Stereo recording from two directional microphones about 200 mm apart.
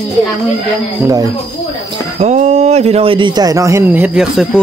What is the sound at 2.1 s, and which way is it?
Speech, 35° right (ahead or behind).